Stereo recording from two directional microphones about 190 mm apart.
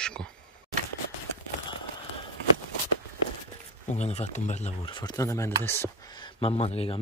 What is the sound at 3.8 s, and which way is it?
Speech, 35° left (ahead or behind).